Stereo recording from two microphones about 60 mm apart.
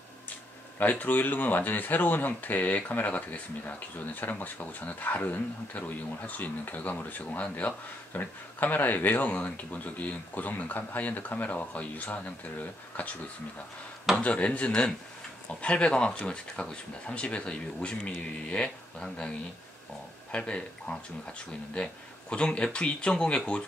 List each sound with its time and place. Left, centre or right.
0.7 s speech: left
14.1 s speech: left